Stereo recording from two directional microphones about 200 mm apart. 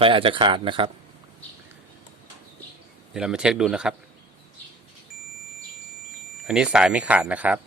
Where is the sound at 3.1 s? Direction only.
5° right (ahead or behind).